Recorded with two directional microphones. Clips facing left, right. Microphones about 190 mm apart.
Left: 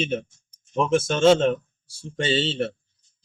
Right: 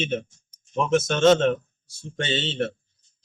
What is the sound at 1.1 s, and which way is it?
Speech, 10° left (ahead or behind).